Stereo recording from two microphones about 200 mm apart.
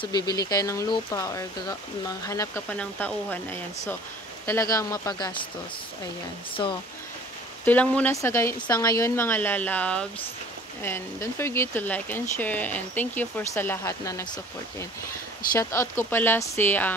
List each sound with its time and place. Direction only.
0.0 s speech: 20° left (ahead or behind)
6.5 s speech: 25° left (ahead or behind)
7.6 s speech: 5° left (ahead or behind)
15.6 s speech: 15° left (ahead or behind)